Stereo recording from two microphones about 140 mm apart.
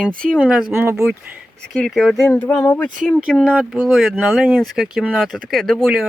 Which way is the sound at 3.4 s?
5° right (ahead or behind).